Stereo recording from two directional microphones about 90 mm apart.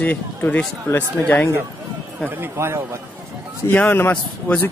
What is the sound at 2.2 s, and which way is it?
Speech, 25° right (ahead or behind).